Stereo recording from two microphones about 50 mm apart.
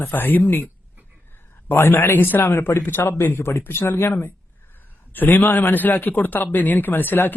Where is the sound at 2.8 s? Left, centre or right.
Left.